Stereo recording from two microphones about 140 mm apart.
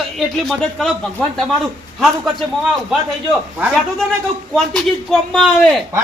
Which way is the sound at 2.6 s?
5° right (ahead or behind).